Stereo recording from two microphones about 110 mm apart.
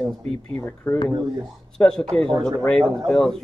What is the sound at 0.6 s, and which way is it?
Speech, 20° left (ahead or behind).